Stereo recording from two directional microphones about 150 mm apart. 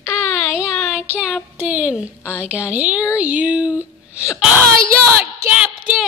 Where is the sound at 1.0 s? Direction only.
5° right (ahead or behind).